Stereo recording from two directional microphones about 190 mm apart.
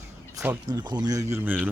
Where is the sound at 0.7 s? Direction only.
25° right (ahead or behind).